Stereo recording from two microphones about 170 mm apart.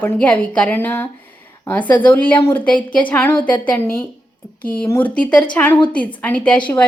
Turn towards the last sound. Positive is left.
turn(degrees=5)  # may be behind; listen again after turning